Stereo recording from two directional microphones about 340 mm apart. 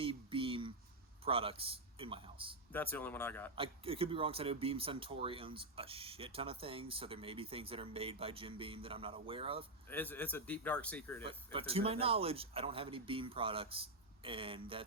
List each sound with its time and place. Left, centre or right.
0.0 s a sound: centre
1.2 s speech: centre
2.7 s a man's voice: centre
3.5 s speech: centre
9.9 s a man's voice: centre
11.3 s speech: centre